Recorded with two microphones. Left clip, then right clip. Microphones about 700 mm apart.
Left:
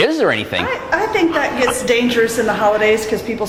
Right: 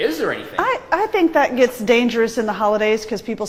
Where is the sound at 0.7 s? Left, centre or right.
Right.